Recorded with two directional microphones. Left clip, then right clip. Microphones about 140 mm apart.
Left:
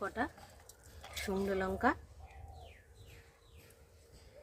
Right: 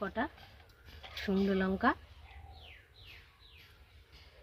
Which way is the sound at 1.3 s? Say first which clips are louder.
Right 3 dB; 50° right (ahead or behind).